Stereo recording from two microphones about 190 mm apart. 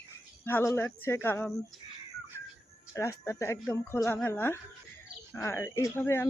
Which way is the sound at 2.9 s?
15° left (ahead or behind).